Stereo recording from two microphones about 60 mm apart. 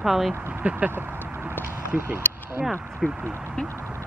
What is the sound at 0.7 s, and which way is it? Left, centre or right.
Speech, right.